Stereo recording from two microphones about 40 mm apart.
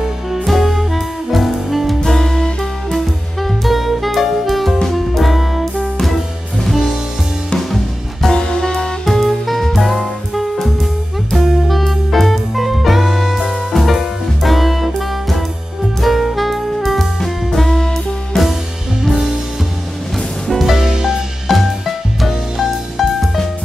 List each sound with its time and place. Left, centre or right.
0.0 s music: centre
2.0 s music: centre
3.4 s music: centre
6.6 s music: centre
8.4 s music: centre
9.0 s music: centre
16.0 s saxophone: centre
17.6 s music: centre
20.6 s music: centre
21.5 s music: centre